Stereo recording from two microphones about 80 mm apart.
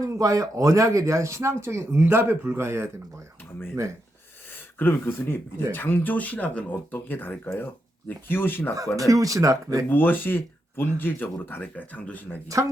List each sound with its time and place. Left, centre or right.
0.0 s speech: right
4.5 s speech: left
9.0 s speech: right
9.9 s speech: left